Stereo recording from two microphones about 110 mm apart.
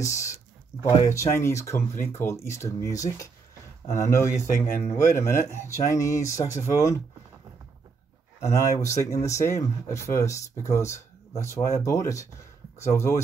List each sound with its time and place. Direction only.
0.0 s speech: 30° left (ahead or behind)
8.4 s speech: 25° left (ahead or behind)